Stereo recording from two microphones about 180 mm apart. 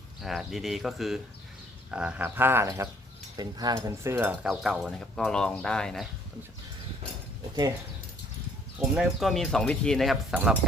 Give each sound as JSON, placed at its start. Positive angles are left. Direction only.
{"t": 0.2, "sound": "speech", "side_deg": 0}
{"t": 1.9, "sound": "frog", "side_deg": -5}
{"t": 4.4, "sound": "speech", "side_deg": 0}
{"t": 9.0, "sound": "speech", "side_deg": 0}